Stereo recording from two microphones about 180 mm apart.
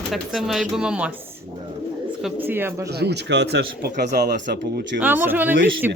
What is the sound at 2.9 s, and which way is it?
Speech, 65° right (ahead or behind).